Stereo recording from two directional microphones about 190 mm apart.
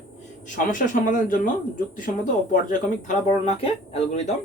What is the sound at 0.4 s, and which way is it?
Speech, 45° left (ahead or behind).